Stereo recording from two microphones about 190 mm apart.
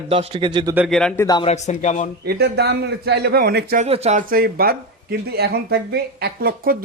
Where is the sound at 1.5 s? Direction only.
40° left (ahead or behind).